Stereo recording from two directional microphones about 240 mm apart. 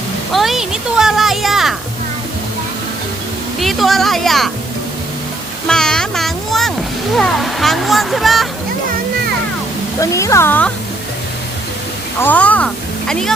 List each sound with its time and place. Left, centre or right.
0.3 s speech: centre
3.6 s speech: centre
5.6 s a sound: centre
7.2 s speech: centre
10.0 s speech: centre
12.2 s speech: centre